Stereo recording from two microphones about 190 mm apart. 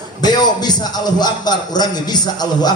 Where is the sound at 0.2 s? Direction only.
20° left (ahead or behind).